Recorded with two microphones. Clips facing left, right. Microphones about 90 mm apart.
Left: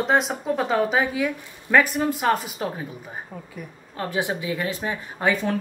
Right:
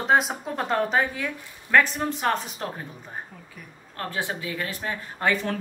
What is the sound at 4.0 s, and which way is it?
Speech, 15° left (ahead or behind).